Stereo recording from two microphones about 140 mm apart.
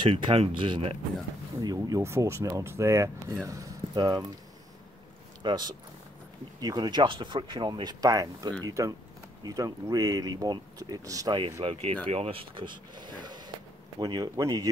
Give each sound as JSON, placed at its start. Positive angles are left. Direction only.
{"t": 0.0, "sound": "speech", "side_deg": -40}
{"t": 5.4, "sound": "speech", "side_deg": -30}
{"t": 11.6, "sound": "speech", "side_deg": -45}